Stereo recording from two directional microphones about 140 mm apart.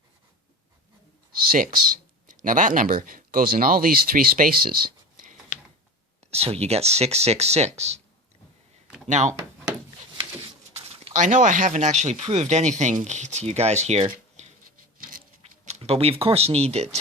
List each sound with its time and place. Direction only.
1.4 s speech: 80° right
5.1 s a sound: 70° right (ahead or behind)
6.3 s speech: 45° right (ahead or behind)
9.0 s speech: 60° right (ahead or behind)
11.2 s speech: 65° right (ahead or behind)
14.9 s patter: 80° right
15.6 s speech: 50° right (ahead or behind)